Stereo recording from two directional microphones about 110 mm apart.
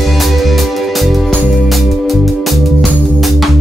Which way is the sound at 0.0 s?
Centre (ahead or behind).